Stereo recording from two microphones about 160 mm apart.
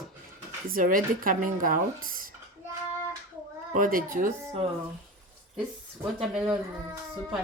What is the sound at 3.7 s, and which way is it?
Speech, 60° right (ahead or behind).